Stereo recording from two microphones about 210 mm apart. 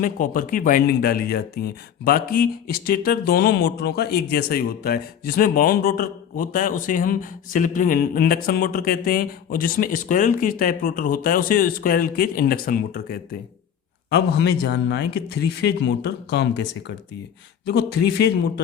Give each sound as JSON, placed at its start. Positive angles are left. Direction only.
{"t": 0.0, "sound": "speech", "side_deg": 40}